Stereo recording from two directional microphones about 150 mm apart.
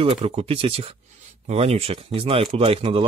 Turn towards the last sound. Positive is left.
turn(degrees=-40)  # may be behind; listen again after turning